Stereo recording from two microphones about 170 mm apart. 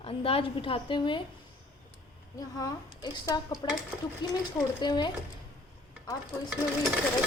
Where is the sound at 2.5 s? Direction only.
20° left (ahead or behind).